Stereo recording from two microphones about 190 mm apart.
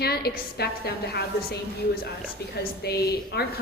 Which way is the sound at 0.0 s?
55° left (ahead or behind).